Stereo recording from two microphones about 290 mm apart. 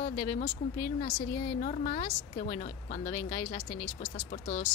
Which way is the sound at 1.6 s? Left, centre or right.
Left.